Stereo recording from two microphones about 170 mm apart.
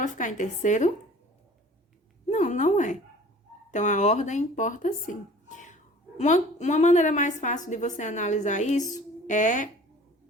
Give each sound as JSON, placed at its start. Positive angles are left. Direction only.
{"t": 0.0, "sound": "a woman's voice", "side_deg": 50}
{"t": 2.2, "sound": "a woman's voice", "side_deg": 45}